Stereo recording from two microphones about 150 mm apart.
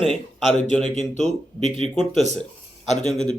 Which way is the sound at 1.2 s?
50° left (ahead or behind).